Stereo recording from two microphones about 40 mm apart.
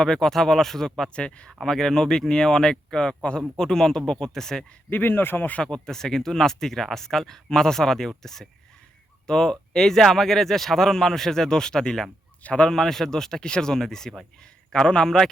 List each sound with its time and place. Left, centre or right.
0.0 s speech: centre
1.1 s speech: left
1.6 s speech: centre
4.9 s speech: left
5.6 s speech: centre
12.4 s a man's voice: left
12.6 s speech: centre
14.7 s speech: left